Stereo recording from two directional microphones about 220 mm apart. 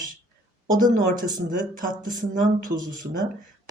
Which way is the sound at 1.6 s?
35° right (ahead or behind).